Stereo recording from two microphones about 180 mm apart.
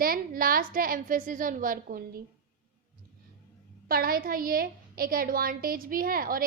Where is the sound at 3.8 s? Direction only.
55° right (ahead or behind).